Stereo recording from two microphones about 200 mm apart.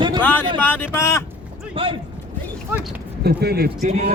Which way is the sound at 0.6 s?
10° left (ahead or behind).